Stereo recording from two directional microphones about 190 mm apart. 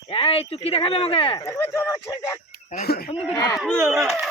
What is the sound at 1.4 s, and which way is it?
Speech, 15° left (ahead or behind).